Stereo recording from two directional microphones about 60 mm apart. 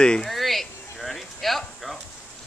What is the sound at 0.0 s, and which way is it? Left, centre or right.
Speech, centre.